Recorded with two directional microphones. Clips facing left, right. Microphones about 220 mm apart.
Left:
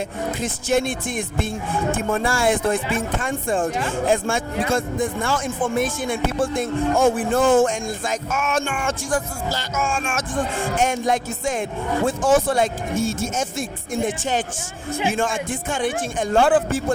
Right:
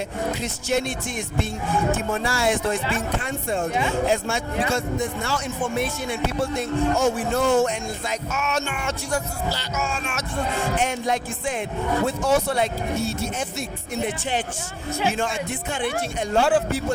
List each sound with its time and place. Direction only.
0.4 s speech: 50° left (ahead or behind)